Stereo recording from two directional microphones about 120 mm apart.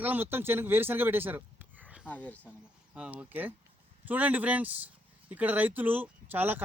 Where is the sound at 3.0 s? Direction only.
10° right (ahead or behind).